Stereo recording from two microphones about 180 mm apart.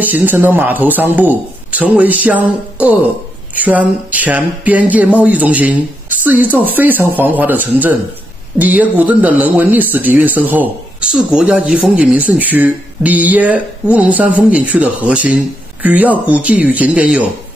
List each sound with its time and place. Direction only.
0.0 s speech: 10° right (ahead or behind)